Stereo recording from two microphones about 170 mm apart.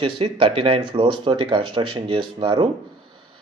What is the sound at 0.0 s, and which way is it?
Speech, 30° right (ahead or behind).